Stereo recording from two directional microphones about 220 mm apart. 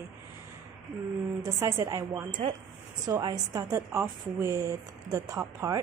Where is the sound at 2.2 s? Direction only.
35° right (ahead or behind).